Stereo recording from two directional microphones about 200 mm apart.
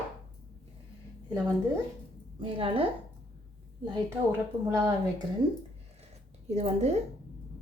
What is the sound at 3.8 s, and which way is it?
A woman's voice, 15° right (ahead or behind).